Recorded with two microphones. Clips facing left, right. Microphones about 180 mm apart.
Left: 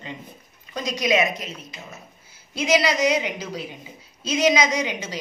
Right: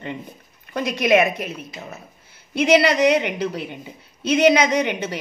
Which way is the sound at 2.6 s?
60° right (ahead or behind).